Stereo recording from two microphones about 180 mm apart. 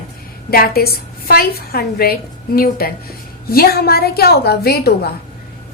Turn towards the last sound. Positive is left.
turn(degrees=60)  # may be behind; listen again after turning